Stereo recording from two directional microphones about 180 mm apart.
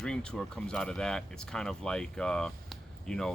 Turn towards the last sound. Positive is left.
turn(degrees=5)  # may be behind; listen again after turning